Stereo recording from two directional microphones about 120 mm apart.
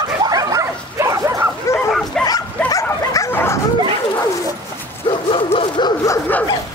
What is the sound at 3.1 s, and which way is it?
Bow-wow, 25° left (ahead or behind).